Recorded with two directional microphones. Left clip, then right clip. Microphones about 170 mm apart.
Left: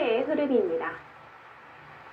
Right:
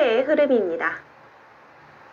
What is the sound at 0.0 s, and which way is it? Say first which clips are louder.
Speech: right 7 dB; 75° right (ahead or behind).